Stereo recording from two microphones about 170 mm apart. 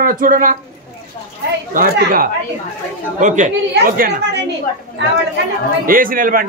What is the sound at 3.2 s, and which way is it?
Speech, 45° right (ahead or behind).